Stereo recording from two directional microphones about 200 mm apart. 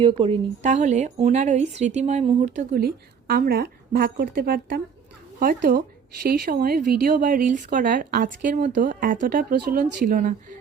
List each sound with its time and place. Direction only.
0.0 s speech: 25° right (ahead or behind); by 10.3 s 45° right (ahead or behind)